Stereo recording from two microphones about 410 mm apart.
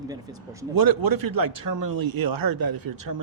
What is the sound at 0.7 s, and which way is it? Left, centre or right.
Speech, right.